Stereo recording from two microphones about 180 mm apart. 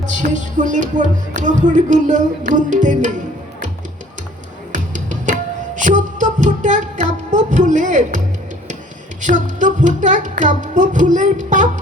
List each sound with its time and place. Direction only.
0.0 s music: 45° right (ahead or behind)
4.7 s music: 45° right (ahead or behind)
9.2 s music: 45° right (ahead or behind)